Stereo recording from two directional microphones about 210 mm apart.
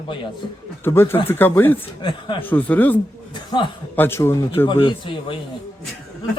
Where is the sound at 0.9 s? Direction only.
10° left (ahead or behind).